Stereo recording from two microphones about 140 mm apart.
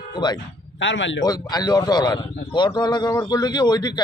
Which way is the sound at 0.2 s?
35° left (ahead or behind).